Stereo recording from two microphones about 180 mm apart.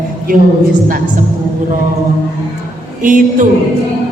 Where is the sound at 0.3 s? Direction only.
50° right (ahead or behind).